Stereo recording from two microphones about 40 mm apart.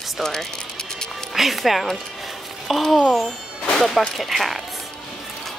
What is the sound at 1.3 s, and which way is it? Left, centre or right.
A child's voice, centre.